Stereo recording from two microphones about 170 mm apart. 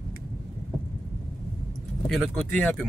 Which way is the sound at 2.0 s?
Centre (ahead or behind).